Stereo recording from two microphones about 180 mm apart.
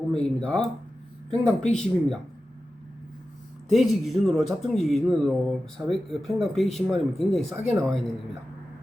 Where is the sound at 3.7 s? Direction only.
Centre (ahead or behind).